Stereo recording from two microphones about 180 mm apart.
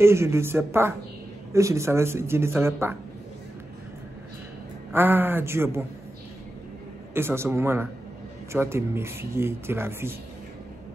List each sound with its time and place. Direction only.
0.0 s speech: 15° right (ahead or behind)
4.9 s speech: 10° right (ahead or behind)
7.2 s speech: 15° right (ahead or behind)